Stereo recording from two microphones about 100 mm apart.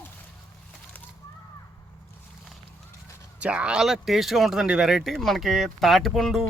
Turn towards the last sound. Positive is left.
turn(degrees=0)  # may be behind; listen again after turning